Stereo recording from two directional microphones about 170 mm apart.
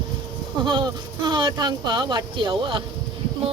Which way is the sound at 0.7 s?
25° right (ahead or behind).